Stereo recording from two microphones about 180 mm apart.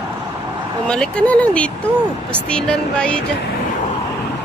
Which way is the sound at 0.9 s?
5° left (ahead or behind).